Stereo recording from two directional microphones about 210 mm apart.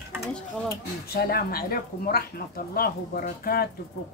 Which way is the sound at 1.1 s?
45° left (ahead or behind).